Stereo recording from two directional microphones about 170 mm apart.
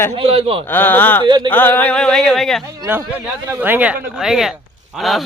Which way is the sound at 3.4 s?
10° right (ahead or behind).